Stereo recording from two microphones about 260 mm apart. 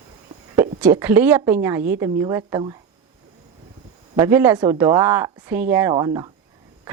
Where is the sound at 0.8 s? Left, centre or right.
Centre.